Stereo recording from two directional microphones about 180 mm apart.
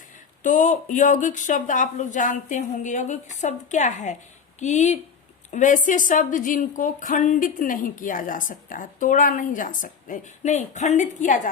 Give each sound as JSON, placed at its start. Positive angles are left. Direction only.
{"t": 0.4, "sound": "a woman's voice", "side_deg": 45}